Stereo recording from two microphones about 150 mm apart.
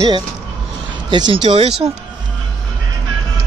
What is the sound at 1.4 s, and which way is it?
Speech, 45° right (ahead or behind).